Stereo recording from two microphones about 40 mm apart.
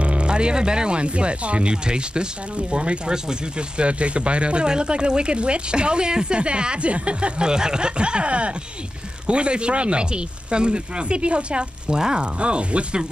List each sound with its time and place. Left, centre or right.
0.0 s speech: right